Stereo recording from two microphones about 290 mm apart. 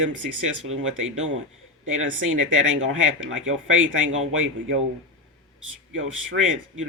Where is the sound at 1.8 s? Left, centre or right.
Right.